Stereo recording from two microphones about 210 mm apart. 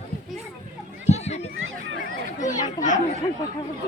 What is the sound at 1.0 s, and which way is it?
Children playing, 30° left (ahead or behind).